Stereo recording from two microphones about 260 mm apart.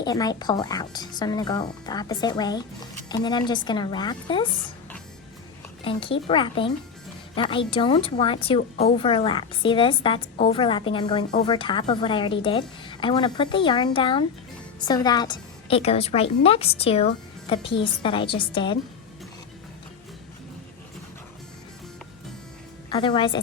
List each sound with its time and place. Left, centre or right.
0.0 s speech: centre
5.8 s speech: centre
22.9 s speech: centre